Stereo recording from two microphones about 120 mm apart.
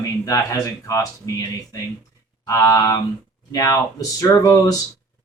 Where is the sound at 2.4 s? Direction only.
25° left (ahead or behind).